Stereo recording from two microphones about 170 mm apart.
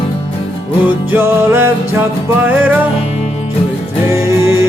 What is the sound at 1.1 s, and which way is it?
Music, 15° right (ahead or behind).